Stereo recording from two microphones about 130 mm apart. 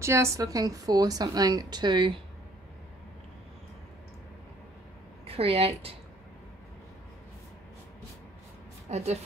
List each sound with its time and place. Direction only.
0.0 s a woman's voice: 20° right (ahead or behind)
5.2 s speech: 50° right (ahead or behind)
8.8 s a woman's voice: 55° right (ahead or behind)